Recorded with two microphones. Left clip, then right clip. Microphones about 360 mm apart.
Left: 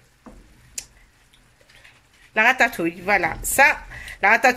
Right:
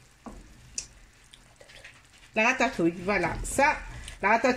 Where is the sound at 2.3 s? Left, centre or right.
Left.